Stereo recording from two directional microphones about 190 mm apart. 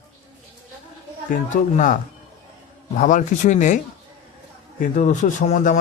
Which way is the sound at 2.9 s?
40° left (ahead or behind).